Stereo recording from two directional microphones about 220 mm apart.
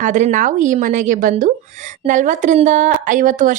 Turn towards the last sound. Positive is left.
turn(degrees=-35)  # may be behind; listen again after turning